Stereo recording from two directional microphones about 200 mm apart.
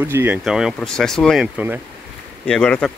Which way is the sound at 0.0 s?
10° right (ahead or behind).